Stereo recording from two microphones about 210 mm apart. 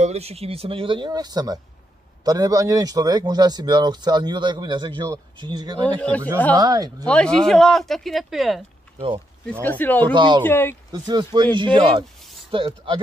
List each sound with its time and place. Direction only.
0.0 s speech: 30° right (ahead or behind)
5.9 s speech: 5° left (ahead or behind)
6.5 s speech: 15° right (ahead or behind)
7.1 s speech: 5° left (ahead or behind)
10.1 s speech: 20° right (ahead or behind)
10.4 s speech: 10° left (ahead or behind)
10.9 s speech: 20° right (ahead or behind)